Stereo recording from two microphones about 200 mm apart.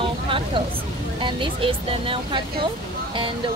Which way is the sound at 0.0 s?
25° right (ahead or behind).